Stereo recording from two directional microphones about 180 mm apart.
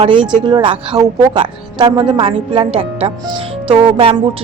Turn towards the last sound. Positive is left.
turn(degrees=-30)  # may be behind; listen again after turning